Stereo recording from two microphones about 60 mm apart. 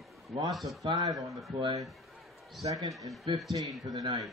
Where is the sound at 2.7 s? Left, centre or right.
Right.